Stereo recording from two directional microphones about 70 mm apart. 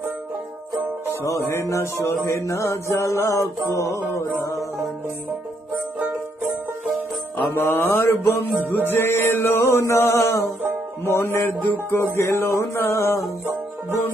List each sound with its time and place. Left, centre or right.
1.2 s mantra: left
7.5 s music: left